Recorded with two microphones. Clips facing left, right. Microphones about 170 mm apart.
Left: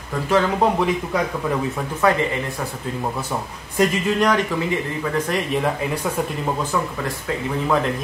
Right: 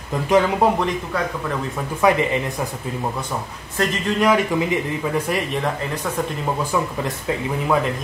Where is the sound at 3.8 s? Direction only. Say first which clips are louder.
Left 2 dB; centre (ahead or behind).